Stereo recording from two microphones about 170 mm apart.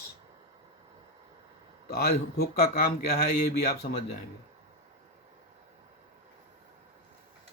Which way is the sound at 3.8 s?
45° left (ahead or behind).